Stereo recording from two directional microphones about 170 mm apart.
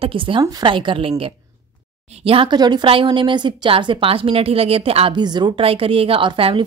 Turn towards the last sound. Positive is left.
turn(degrees=-30)  # may be behind; listen again after turning